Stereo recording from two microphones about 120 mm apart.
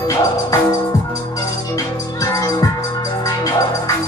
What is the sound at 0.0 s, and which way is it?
Music, 25° left (ahead or behind).